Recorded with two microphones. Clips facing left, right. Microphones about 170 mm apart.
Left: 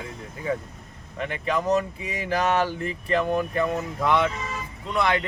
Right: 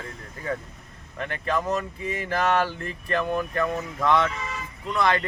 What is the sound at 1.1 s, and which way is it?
Speech, 15° left (ahead or behind).